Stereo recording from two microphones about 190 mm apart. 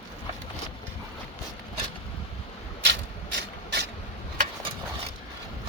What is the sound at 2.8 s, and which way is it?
Mechanisms, 65° right (ahead or behind).